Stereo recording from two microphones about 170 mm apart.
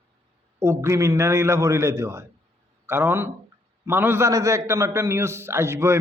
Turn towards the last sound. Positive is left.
turn(degrees=-15)  # may be behind; listen again after turning